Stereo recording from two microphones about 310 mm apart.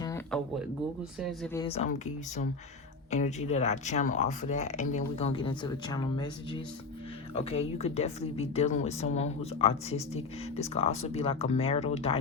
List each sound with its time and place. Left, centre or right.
0.0 s a sound: centre
1.2 s speech: centre
1.5 s speech: centre
3.1 s speech: left